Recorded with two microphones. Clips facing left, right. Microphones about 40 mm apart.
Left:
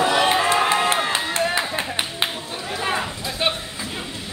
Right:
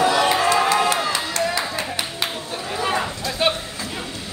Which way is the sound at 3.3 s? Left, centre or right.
Centre.